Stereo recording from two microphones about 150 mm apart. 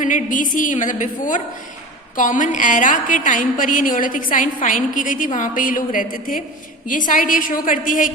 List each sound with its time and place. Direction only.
0.0 s a woman's voice: 60° left (ahead or behind)